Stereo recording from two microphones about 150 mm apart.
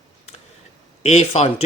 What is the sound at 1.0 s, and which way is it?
Speech, 50° left (ahead or behind).